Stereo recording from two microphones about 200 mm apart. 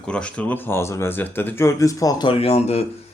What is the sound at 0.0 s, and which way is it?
Speech, 5° left (ahead or behind).